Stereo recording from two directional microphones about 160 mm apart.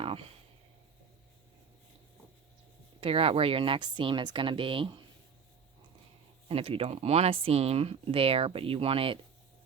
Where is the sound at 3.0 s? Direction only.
35° right (ahead or behind).